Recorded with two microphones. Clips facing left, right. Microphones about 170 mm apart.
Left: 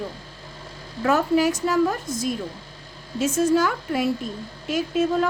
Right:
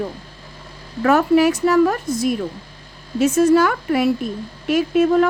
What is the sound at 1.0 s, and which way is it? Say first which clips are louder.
A woman's voice: right 5 dB; 65° right (ahead or behind).